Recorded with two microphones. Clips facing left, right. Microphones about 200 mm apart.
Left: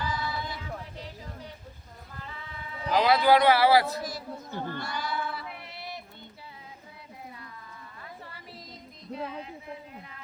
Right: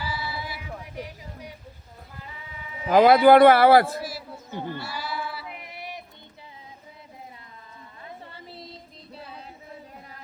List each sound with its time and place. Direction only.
0.0 s music: 10° right (ahead or behind)
2.9 s speech: 55° right (ahead or behind)
4.0 s sheep: 10° right (ahead or behind)
8.0 s a sound: 25° right (ahead or behind)